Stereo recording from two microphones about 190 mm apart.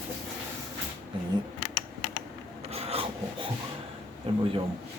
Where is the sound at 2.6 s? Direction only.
30° right (ahead or behind).